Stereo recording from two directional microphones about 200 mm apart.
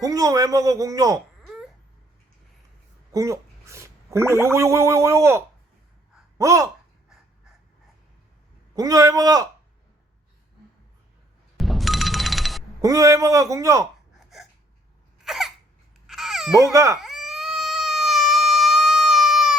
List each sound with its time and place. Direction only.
0.0 s a man's voice: 15° right (ahead or behind)
1.4 s a sound: centre (ahead or behind)
3.1 s speech: 15° right (ahead or behind)
8.7 s a man's voice: 20° right (ahead or behind)
11.5 s music: centre (ahead or behind)
12.8 s a man's voice: 15° right (ahead or behind)
15.2 s cough: centre (ahead or behind)
16.0 s babbling: centre (ahead or behind)
16.6 s a man's voice: 15° right (ahead or behind)
17.0 s cat: centre (ahead or behind)